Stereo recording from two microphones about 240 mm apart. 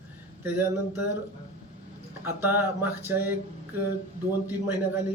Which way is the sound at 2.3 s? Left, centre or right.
Centre.